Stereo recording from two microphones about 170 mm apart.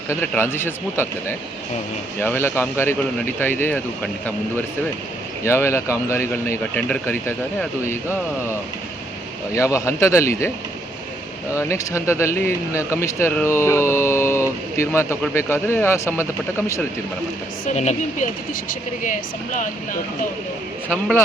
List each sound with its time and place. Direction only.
0.1 s speech: 15° left (ahead or behind)
5.5 s speech: 15° left (ahead or behind)
9.6 s speech: 15° left (ahead or behind)
11.7 s speech: 15° left (ahead or behind)
17.7 s speech: 45° left (ahead or behind)
20.9 s speech: 10° left (ahead or behind)